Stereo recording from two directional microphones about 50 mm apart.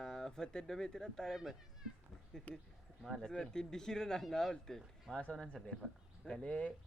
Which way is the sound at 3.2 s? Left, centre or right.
Centre.